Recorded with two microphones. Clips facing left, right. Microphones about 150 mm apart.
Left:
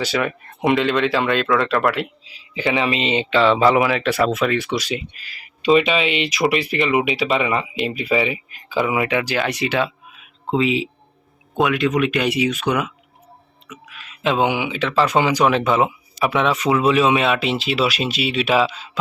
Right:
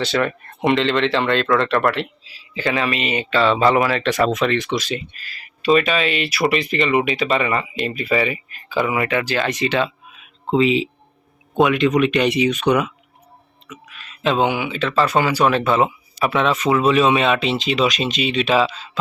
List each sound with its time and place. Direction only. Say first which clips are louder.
0.0 s speech: right 1 dB; 10° left (ahead or behind)